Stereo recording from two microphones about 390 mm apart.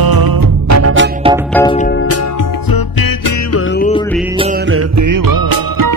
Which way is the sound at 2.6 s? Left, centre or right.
Left.